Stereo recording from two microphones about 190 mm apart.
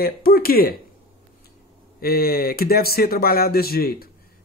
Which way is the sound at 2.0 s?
50° left (ahead or behind).